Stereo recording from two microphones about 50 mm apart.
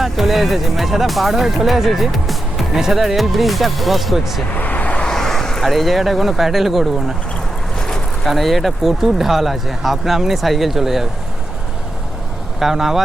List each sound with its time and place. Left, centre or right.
0.0 s speech: centre
4.5 s vehicle: left
4.9 s vehicle: centre
5.6 s speech: centre
7.8 s vehicle: centre
8.3 s speech: centre
12.5 s speech: centre